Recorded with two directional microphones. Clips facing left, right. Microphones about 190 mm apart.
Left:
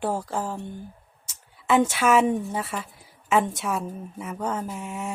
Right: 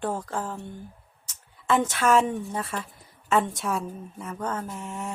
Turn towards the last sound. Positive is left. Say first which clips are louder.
# left 2 dB
turn(degrees=5)  # may be behind; listen again after turning